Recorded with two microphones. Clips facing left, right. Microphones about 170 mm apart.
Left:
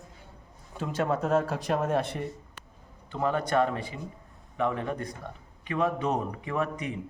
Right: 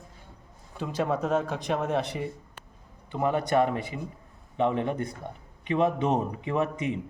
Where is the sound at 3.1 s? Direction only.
15° right (ahead or behind).